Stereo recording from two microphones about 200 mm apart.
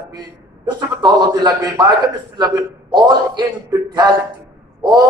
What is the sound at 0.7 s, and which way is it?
A man's voice, 20° right (ahead or behind).